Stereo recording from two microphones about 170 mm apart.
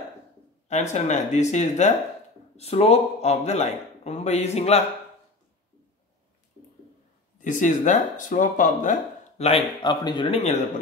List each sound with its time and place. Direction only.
0.7 s a man's voice: 45° left (ahead or behind)
7.3 s speech: 50° left (ahead or behind)
9.5 s speech: 25° left (ahead or behind)